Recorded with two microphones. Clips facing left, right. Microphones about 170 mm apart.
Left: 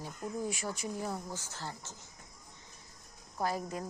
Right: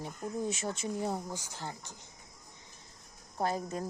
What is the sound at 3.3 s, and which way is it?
Speech, 25° right (ahead or behind).